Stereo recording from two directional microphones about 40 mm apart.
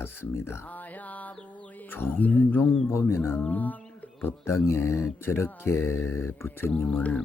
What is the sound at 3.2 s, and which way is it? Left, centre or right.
Mantra, left.